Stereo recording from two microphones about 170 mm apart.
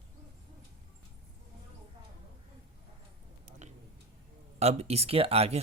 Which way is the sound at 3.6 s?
45° right (ahead or behind).